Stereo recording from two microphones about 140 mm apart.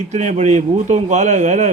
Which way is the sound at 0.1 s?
55° right (ahead or behind).